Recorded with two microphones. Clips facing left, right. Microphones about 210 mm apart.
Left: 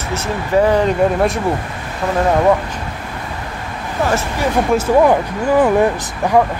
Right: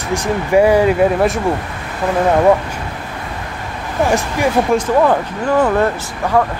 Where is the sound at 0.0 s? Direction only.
15° right (ahead or behind).